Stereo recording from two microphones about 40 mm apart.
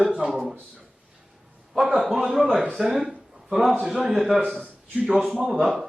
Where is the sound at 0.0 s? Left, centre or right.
Right.